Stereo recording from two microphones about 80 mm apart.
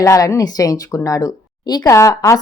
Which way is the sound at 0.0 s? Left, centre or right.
Left.